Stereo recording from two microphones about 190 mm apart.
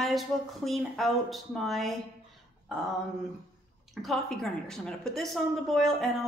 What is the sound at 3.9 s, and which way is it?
A woman's voice, centre (ahead or behind).